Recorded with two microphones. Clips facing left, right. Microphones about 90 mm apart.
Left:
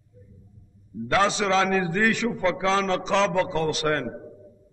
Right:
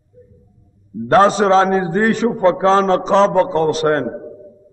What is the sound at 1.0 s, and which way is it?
A man's voice, 40° right (ahead or behind).